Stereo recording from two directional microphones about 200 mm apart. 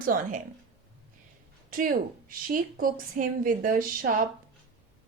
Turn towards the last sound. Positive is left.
turn(degrees=-45)  # may be behind; listen again after turning